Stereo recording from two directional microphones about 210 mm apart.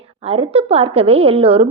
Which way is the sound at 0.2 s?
30° right (ahead or behind).